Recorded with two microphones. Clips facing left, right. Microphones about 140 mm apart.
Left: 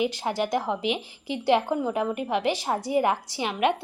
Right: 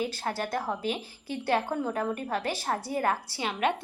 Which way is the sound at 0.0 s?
15° left (ahead or behind).